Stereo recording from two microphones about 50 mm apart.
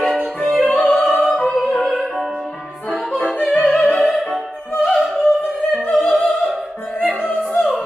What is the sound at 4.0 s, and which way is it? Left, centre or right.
Music, centre.